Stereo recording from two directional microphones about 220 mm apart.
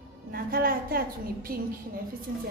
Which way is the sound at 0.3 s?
40° right (ahead or behind).